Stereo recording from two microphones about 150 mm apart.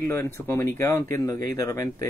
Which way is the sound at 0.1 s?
15° left (ahead or behind).